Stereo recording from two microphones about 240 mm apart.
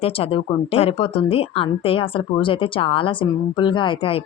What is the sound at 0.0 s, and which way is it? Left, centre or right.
A woman's voice, left.